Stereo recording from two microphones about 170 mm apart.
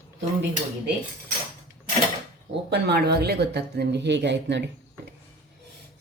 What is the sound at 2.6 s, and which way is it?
Speech, 80° right.